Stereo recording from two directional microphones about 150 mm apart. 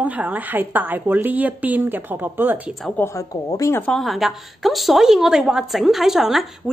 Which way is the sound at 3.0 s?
20° left (ahead or behind).